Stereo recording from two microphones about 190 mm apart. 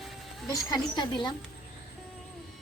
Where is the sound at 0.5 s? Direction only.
20° left (ahead or behind).